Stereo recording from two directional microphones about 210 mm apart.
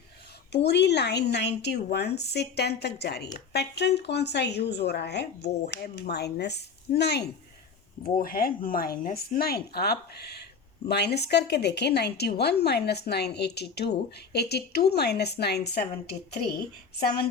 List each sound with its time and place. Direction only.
0.5 s a woman's voice: 55° left (ahead or behind)